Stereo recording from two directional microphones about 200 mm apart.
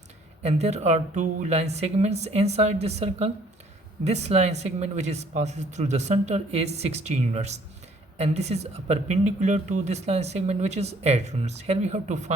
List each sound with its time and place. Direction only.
0.4 s speech: 35° right (ahead or behind)